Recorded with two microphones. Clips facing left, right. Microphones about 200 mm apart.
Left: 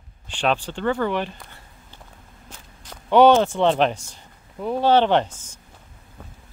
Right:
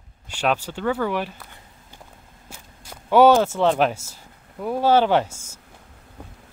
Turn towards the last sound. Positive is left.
turn(degrees=-10)  # may be behind; listen again after turning